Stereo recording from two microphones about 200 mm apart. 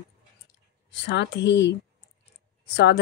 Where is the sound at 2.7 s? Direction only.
60° left (ahead or behind).